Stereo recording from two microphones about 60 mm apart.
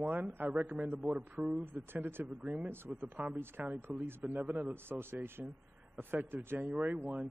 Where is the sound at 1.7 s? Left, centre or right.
Right.